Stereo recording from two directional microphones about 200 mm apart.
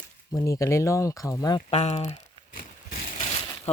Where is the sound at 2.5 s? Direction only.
45° left (ahead or behind).